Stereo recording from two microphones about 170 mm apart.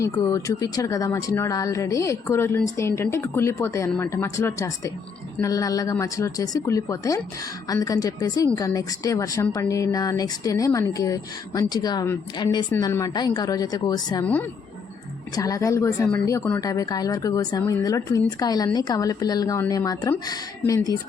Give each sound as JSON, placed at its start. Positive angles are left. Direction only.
{"t": 0.0, "sound": "speech", "side_deg": 20}
{"t": 15.4, "sound": "speech", "side_deg": 20}